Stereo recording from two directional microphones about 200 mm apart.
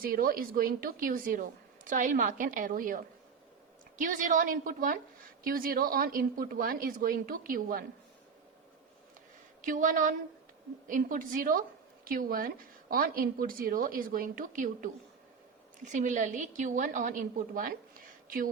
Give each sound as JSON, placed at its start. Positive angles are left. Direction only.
{"t": 0.0, "sound": "a woman's voice", "side_deg": -45}
{"t": 9.6, "sound": "a woman's voice", "side_deg": -40}